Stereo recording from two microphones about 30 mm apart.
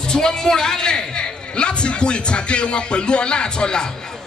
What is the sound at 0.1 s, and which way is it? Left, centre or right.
A man's voice, left.